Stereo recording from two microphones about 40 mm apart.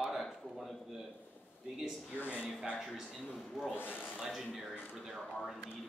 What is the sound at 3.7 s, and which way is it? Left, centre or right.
Speech, left.